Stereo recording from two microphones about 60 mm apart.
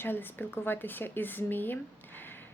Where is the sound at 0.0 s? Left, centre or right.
Left.